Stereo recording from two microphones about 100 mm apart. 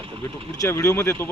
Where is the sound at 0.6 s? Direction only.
30° left (ahead or behind).